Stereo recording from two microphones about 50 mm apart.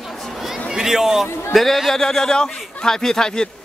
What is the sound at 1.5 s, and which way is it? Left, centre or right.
Speech, centre.